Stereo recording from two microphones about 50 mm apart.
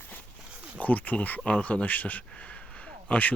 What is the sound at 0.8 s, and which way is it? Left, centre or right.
Speech, left.